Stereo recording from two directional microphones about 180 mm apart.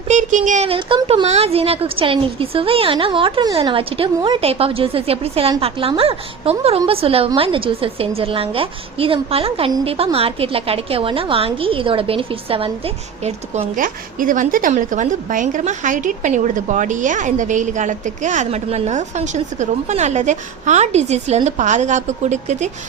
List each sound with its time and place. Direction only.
0.1 s a woman's voice: 45° right (ahead or behind)